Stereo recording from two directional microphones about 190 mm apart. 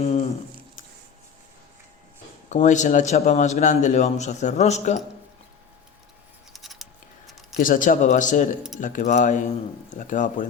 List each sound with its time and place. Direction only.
0.0 s squish: 35° left (ahead or behind)
2.5 s a man's voice: 40° left (ahead or behind)
6.5 s scissors: centre (ahead or behind)
7.5 s a man's voice: 45° left (ahead or behind)